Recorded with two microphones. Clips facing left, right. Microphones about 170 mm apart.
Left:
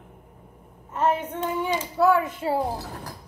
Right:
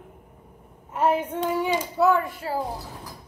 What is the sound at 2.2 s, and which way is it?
Speech, 25° left (ahead or behind).